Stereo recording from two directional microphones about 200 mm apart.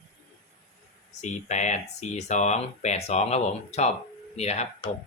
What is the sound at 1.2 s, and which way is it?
Speech, 35° left (ahead or behind).